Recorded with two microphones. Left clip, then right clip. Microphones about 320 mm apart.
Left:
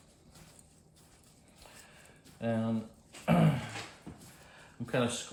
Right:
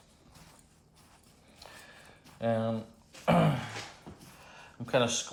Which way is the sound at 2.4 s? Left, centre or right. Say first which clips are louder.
Right 4 dB; centre.